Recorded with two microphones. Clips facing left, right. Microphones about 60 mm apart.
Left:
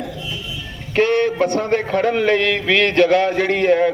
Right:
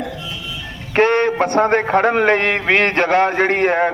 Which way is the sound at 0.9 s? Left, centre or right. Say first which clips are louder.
Right 2 dB; right.